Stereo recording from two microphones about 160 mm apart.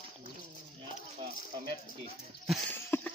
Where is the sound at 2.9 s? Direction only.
15° left (ahead or behind).